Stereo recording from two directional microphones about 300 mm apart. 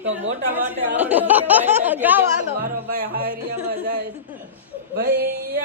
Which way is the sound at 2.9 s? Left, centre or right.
Right.